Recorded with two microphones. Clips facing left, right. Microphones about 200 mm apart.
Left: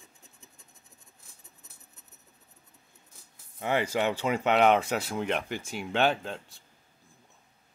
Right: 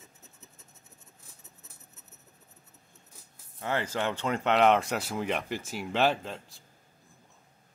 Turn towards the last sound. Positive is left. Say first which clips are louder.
# left 1 dB
turn(degrees=0)  # may be behind; listen again after turning